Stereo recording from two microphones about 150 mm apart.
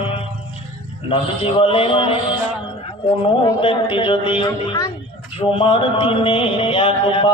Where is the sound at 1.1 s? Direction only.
35° left (ahead or behind).